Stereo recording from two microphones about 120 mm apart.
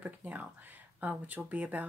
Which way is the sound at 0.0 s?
15° right (ahead or behind).